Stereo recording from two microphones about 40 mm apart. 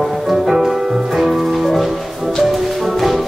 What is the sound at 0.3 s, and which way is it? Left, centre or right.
Music, centre.